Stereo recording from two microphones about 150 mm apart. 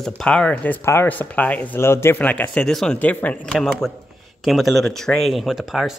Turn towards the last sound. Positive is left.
turn(degrees=0)  # may be behind; listen again after turning